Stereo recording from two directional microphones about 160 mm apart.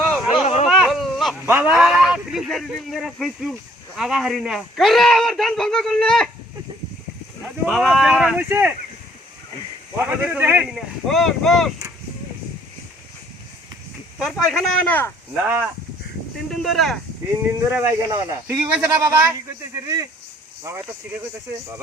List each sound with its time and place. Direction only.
0.0 s a sound: centre (ahead or behind)
0.4 s a sound: 40° left (ahead or behind)
0.7 s a sound: centre (ahead or behind)
1.5 s a man's voice: 10° right (ahead or behind)
7.4 s a man's voice: centre (ahead or behind)
10.0 s speech: 10° right (ahead or behind)
10.8 s a man's voice: centre (ahead or behind)
14.2 s a man's voice: centre (ahead or behind)
14.8 s speech: 10° left (ahead or behind)
16.5 s a man's voice: centre (ahead or behind)
17.6 s speech: 15° right (ahead or behind)
18.5 s speech: 5° right (ahead or behind)